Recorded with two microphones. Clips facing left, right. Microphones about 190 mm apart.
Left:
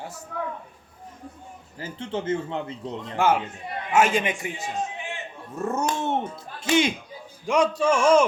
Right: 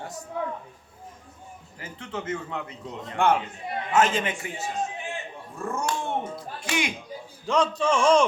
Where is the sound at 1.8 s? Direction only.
30° left (ahead or behind).